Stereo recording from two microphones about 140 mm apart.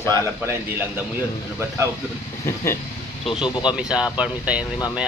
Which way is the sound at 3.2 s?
35° left (ahead or behind).